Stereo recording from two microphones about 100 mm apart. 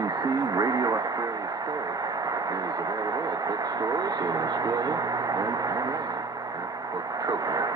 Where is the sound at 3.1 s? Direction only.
40° right (ahead or behind).